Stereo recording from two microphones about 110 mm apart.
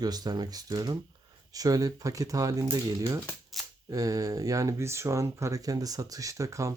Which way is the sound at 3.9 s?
30° right (ahead or behind).